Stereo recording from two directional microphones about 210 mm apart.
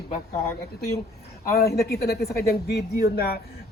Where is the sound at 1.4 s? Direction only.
45° left (ahead or behind).